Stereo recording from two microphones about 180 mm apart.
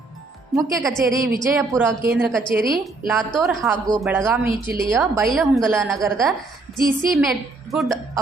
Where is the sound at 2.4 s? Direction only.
25° left (ahead or behind).